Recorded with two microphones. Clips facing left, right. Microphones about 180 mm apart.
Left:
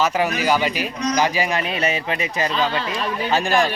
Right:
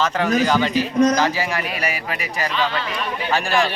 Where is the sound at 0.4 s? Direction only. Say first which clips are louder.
Right 1 dB; 10° left (ahead or behind).